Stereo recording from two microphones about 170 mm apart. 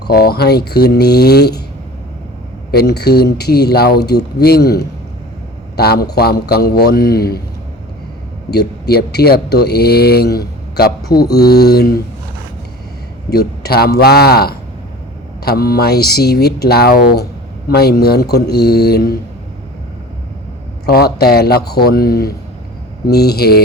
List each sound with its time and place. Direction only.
0.0 s speech: 65° left (ahead or behind)
2.7 s a man's voice: 70° left (ahead or behind)
8.4 s speech: 70° left (ahead or behind)
13.3 s speech: 65° left (ahead or behind)
20.8 s a man's voice: 65° left (ahead or behind)